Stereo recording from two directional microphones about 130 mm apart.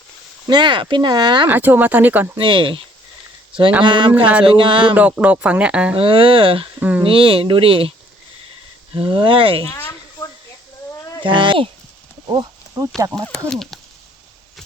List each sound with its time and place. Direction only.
0.4 s speech: 35° right (ahead or behind)
1.5 s speech: 15° right (ahead or behind)
2.4 s speech: 40° right (ahead or behind)
3.8 s speech: 40° right (ahead or behind)
4.9 s speech: 10° right (ahead or behind)
6.0 s speech: 45° right (ahead or behind)
6.7 s speech: 10° right (ahead or behind)
7.0 s speech: 45° right (ahead or behind)
9.0 s speech: 40° right (ahead or behind)
9.6 s a sound: 25° left (ahead or behind)
11.2 s speech: 40° right (ahead or behind)
12.3 s speech: 30° right (ahead or behind)
13.5 s speech: centre (ahead or behind)